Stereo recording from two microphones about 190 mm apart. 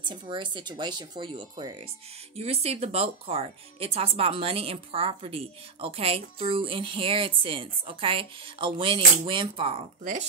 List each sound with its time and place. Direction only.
0.1 s speech: 25° right (ahead or behind)